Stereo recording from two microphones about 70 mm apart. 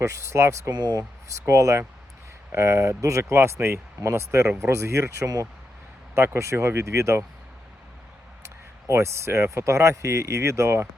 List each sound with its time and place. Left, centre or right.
0.0 s speech: right
0.7 s speech: right
1.3 s speech: right
8.9 s speech: right